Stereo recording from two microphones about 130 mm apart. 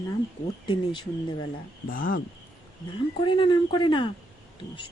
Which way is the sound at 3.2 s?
40° left (ahead or behind).